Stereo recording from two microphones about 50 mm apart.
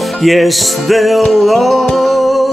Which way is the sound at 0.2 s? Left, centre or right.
Centre.